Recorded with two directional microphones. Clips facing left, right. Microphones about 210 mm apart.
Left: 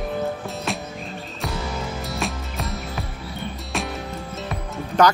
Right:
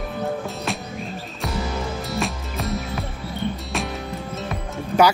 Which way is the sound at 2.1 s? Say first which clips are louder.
Right 2 dB; centre (ahead or behind).